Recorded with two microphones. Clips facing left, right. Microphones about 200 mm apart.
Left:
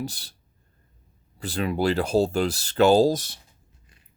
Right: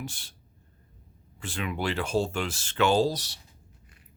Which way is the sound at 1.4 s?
35° left (ahead or behind).